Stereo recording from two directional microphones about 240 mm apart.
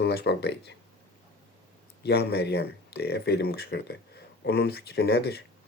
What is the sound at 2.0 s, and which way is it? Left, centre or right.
Speech, left.